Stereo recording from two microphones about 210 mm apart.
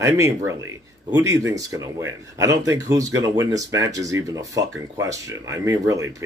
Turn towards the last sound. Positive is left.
turn(degrees=-15)  # may be behind; listen again after turning